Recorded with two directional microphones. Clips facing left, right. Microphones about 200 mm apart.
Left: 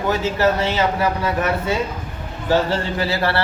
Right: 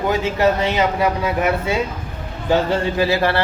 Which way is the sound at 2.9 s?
20° right (ahead or behind).